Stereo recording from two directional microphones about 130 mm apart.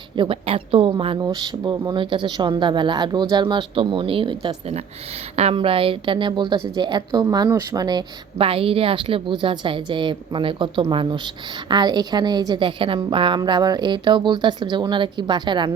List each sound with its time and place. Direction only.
0.2 s a woman's voice: 45° right (ahead or behind)
4.6 s a woman's voice: 55° right (ahead or behind); by 8.0 s 30° right (ahead or behind)
8.4 s a woman's voice: 45° right (ahead or behind)